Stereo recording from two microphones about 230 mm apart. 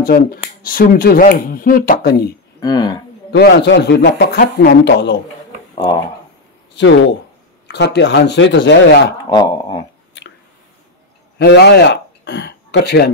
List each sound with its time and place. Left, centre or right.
0.0 s speech: left
2.6 s speech: centre
3.3 s a man's voice: left
6.7 s a sound: left
7.6 s a man's voice: left
9.3 s speech: centre
11.3 s speech: left